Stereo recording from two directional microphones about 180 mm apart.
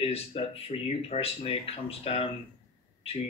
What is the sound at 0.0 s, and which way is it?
Speech, 35° left (ahead or behind).